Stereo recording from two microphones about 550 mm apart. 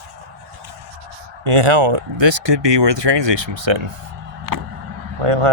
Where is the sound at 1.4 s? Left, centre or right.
Right.